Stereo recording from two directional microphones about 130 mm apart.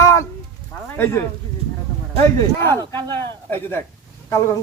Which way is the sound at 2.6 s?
20° left (ahead or behind).